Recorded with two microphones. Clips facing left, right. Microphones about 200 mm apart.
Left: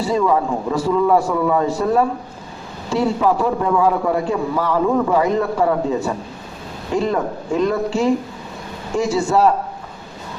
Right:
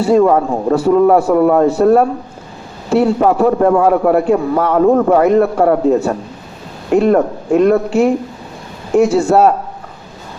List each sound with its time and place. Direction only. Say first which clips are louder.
0.2 s a man's voice: right 6 dB; 60° right (ahead or behind)